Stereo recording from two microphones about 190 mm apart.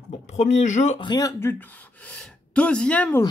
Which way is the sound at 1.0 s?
20° left (ahead or behind).